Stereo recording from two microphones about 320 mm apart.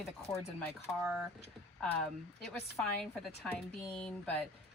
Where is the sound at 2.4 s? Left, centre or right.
Centre.